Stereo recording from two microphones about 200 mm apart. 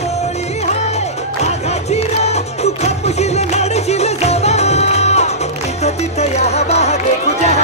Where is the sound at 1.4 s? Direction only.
35° left (ahead or behind).